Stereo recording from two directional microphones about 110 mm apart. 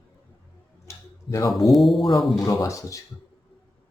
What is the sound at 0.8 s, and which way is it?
Tick-tock, 30° left (ahead or behind).